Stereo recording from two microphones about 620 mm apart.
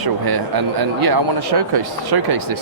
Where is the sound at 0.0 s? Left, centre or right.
Right.